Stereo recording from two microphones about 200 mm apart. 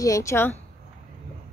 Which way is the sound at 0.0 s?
15° left (ahead or behind).